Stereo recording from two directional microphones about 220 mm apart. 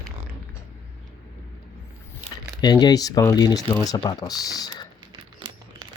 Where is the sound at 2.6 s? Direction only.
20° left (ahead or behind).